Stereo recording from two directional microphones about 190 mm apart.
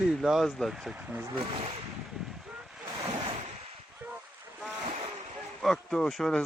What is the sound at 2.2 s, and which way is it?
Ocean, centre (ahead or behind).